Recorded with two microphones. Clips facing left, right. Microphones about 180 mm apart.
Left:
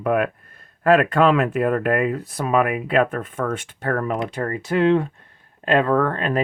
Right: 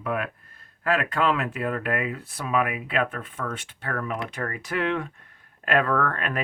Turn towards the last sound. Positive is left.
turn(degrees=30)  # may be behind; listen again after turning